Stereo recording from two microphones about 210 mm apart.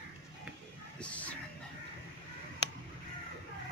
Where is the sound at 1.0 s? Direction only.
5° left (ahead or behind).